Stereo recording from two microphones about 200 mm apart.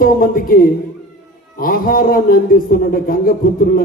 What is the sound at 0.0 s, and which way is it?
A man's voice, 45° left (ahead or behind).